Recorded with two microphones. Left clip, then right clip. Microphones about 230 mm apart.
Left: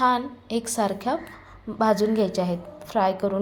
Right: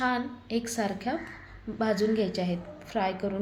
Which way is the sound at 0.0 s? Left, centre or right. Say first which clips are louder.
Left 7 dB; centre.